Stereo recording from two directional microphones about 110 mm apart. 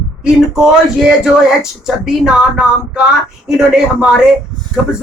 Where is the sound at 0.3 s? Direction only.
5° right (ahead or behind).